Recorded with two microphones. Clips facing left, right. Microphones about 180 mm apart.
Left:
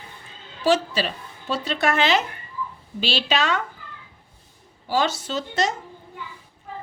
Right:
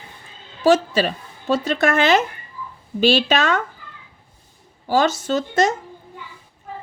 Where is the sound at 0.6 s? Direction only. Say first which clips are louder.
Right 5 dB; 45° right (ahead or behind).